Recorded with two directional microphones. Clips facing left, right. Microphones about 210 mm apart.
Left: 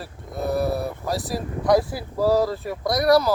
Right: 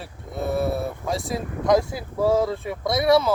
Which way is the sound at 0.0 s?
Centre (ahead or behind).